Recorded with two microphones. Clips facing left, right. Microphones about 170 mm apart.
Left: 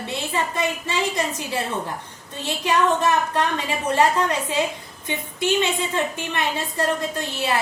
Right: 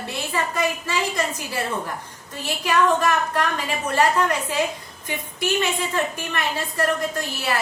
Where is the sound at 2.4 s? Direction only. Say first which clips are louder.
Even; 25° left (ahead or behind).